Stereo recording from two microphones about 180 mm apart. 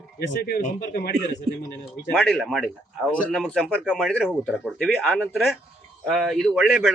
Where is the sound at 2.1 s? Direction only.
5° left (ahead or behind).